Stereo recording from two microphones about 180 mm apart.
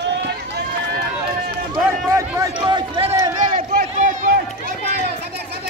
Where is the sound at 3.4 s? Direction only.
50° right (ahead or behind).